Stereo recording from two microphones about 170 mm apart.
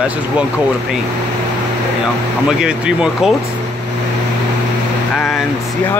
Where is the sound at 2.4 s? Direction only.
5° right (ahead or behind).